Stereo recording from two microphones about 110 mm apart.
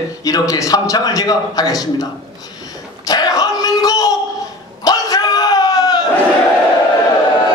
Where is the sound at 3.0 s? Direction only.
35° left (ahead or behind).